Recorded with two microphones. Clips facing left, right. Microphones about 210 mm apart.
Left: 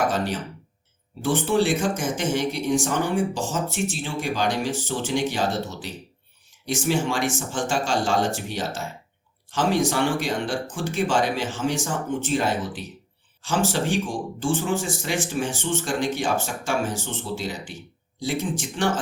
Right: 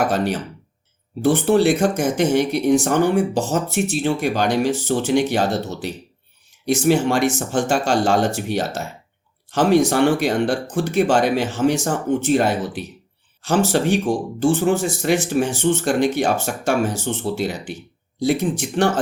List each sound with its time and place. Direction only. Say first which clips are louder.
0.1 s speech: right 5 dB; 65° right (ahead or behind)